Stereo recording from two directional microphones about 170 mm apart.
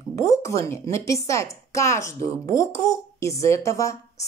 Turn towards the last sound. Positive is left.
turn(degrees=20)  # may be behind; listen again after turning